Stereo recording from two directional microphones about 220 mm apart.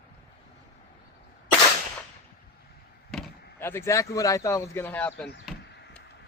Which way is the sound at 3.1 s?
5° left (ahead or behind).